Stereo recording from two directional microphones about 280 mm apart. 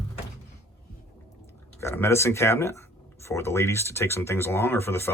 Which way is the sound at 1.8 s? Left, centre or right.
Centre.